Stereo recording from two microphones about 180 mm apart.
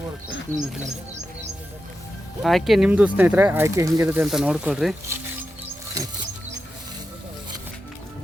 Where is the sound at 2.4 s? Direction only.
Centre (ahead or behind).